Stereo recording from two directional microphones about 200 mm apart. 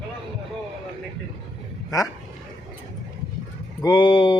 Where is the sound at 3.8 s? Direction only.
20° left (ahead or behind).